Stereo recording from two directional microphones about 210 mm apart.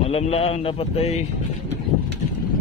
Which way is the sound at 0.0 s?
30° left (ahead or behind).